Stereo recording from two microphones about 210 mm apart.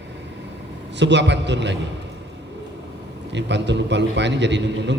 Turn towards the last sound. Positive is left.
turn(degrees=-55)  # may be behind; listen again after turning